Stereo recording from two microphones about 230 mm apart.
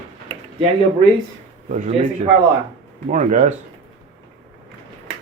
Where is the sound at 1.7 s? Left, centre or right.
Right.